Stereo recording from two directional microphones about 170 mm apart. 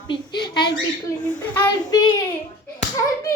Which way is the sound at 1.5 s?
15° left (ahead or behind).